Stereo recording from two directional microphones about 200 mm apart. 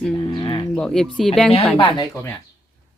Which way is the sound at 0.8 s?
5° left (ahead or behind).